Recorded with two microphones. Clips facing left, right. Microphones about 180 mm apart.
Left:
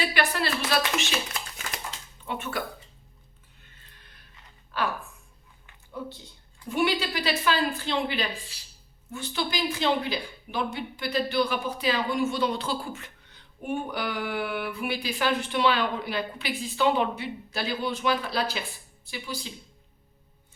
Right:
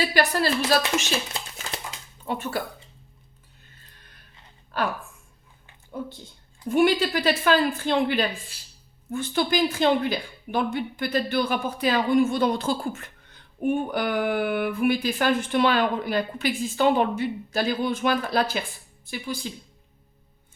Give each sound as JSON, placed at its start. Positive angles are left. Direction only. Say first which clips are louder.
{"t": 0.0, "sound": "speech", "louder": "right 4 dB", "side_deg": -40}
{"t": 2.2, "sound": "speech", "louder": "right 4 dB", "side_deg": -40}
{"t": 6.0, "sound": "speech", "louder": "right 3 dB", "side_deg": -45}